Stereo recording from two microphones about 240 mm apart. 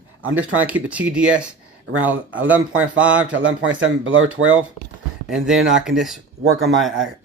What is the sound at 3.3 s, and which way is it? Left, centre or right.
Speech, right.